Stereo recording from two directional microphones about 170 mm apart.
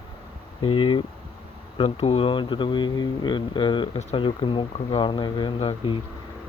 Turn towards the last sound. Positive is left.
turn(degrees=30)  # may be behind; listen again after turning